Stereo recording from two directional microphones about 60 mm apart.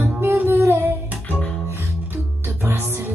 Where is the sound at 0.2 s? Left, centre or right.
Right.